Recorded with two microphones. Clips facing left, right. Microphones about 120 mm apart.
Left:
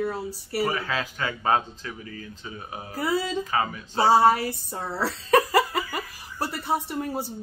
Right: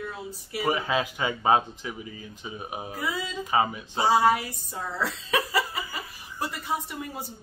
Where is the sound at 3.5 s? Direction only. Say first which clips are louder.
Right 2 dB; 20° right (ahead or behind).